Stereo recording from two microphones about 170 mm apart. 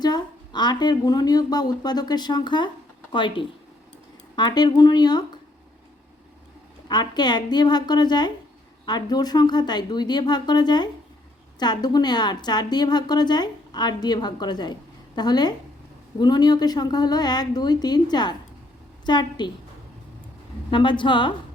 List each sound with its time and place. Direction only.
0.0 s a woman's voice: 25° left (ahead or behind)
6.8 s a woman's voice: 25° left (ahead or behind)
20.7 s a woman's voice: 30° left (ahead or behind)